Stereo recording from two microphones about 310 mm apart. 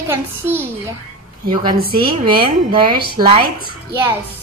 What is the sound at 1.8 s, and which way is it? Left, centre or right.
Speech, right.